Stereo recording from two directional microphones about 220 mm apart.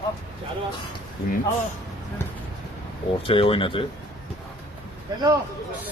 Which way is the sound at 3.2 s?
25° left (ahead or behind).